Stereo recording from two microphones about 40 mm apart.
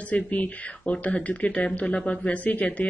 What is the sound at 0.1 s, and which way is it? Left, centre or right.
Speech, left.